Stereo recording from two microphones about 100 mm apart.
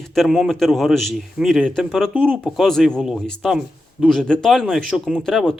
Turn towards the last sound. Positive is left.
turn(degrees=5)  # may be behind; listen again after turning